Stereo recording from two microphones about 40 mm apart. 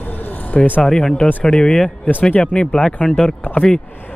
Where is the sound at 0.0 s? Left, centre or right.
Left.